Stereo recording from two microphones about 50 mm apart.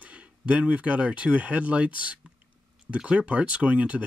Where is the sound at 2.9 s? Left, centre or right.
Right.